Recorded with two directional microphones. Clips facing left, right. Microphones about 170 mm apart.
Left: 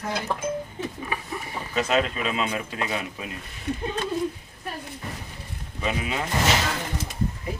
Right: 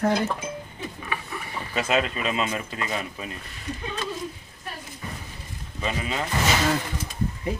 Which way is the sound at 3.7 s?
60° left (ahead or behind).